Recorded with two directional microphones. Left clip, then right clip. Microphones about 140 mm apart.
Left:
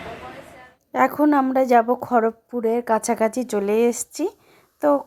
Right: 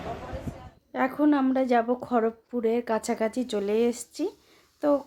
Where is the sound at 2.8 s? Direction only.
25° left (ahead or behind).